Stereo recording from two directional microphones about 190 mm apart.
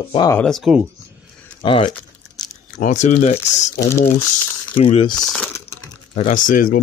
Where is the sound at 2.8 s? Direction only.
40° left (ahead or behind).